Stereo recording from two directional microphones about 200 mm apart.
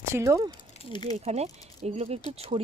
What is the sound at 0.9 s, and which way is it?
Speech, 20° left (ahead or behind).